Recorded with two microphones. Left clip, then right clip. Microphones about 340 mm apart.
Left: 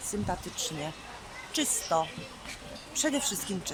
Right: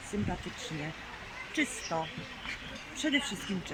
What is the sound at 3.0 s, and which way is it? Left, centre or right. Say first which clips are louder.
Speech: left 2 dB; left.